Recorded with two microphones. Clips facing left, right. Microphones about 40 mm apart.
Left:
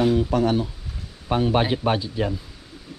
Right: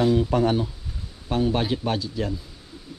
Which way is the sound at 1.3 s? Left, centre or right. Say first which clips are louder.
Left 3 dB; left.